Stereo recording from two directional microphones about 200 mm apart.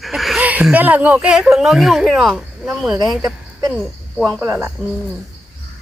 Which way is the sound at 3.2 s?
15° right (ahead or behind).